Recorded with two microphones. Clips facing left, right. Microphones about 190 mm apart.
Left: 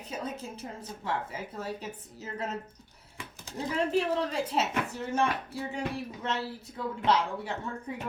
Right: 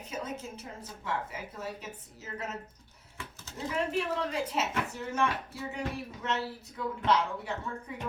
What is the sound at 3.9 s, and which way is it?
Speech, 30° left (ahead or behind).